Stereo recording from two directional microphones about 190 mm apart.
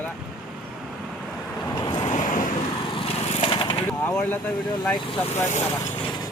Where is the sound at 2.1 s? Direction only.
40° left (ahead or behind).